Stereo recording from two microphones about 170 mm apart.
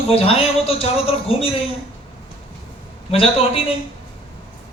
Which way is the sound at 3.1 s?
35° left (ahead or behind).